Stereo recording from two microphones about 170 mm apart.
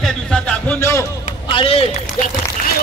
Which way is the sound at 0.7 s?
15° left (ahead or behind).